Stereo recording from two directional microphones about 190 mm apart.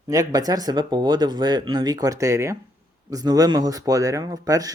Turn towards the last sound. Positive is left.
turn(degrees=-20)  # may be behind; listen again after turning